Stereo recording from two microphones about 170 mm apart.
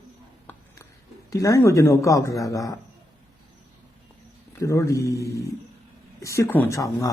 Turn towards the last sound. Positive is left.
turn(degrees=20)  # may be behind; listen again after turning